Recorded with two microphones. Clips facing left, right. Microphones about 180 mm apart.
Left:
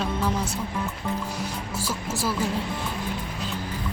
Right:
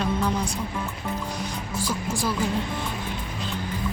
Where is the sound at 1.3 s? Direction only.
5° left (ahead or behind).